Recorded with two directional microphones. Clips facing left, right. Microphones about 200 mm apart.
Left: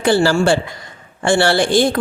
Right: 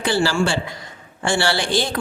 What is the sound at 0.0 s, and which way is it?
Speech, 50° left (ahead or behind).